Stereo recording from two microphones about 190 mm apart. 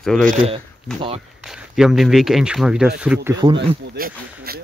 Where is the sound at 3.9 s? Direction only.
50° right (ahead or behind).